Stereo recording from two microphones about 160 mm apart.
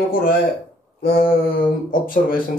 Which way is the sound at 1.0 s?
65° left (ahead or behind).